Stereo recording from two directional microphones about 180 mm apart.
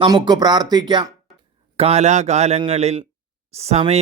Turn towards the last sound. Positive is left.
turn(degrees=-35)  # may be behind; listen again after turning